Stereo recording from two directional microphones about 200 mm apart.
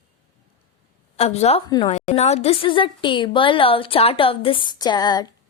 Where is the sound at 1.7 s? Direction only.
20° left (ahead or behind).